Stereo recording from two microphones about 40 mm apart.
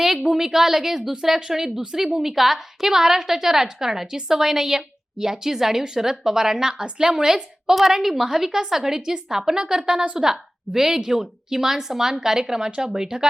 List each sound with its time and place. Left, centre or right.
0.3 s a woman's voice: centre
7.8 s a woman's voice: centre